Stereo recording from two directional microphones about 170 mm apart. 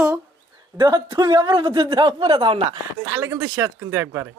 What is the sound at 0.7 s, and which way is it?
A man's voice, 20° right (ahead or behind).